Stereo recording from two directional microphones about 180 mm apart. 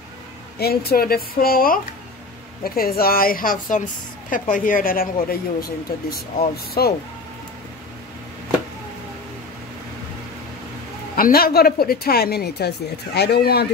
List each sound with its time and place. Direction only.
0.6 s a woman's voice: 60° left (ahead or behind)
11.1 s a woman's voice: 55° left (ahead or behind)